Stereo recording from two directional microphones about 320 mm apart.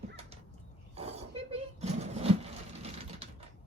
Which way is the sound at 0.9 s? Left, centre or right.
Centre.